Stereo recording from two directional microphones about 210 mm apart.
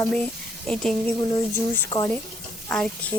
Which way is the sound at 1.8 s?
15° left (ahead or behind).